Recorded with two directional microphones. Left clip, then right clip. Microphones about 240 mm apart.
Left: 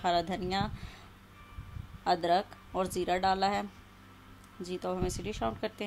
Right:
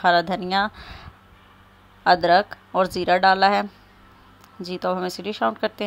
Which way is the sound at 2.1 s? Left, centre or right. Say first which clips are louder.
Right 12 dB; centre.